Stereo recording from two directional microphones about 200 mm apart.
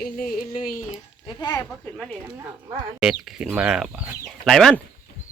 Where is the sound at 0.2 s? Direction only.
45° left (ahead or behind).